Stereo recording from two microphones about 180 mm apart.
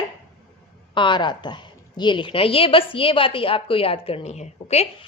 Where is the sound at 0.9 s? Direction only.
25° left (ahead or behind).